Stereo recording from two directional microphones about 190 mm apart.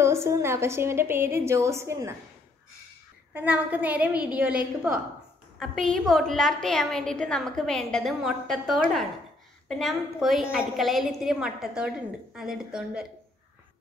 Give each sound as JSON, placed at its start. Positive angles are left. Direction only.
{"t": 0.0, "sound": "a woman's voice", "side_deg": -15}
{"t": 3.3, "sound": "a woman's voice", "side_deg": -10}